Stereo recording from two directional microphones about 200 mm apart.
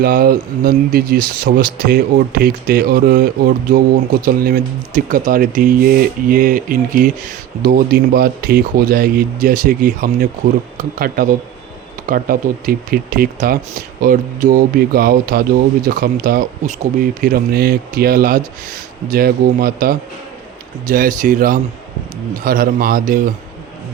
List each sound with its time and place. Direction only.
0.0 s speech: 45° right (ahead or behind)
4.3 s speech: 45° right (ahead or behind)